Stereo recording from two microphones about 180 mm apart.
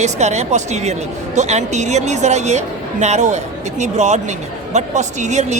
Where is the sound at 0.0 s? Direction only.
40° right (ahead or behind).